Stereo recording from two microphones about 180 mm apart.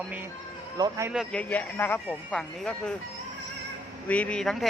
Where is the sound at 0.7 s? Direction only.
20° right (ahead or behind).